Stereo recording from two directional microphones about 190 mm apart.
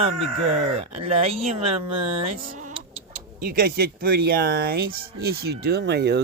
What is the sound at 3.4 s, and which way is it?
Speech, 55° right (ahead or behind).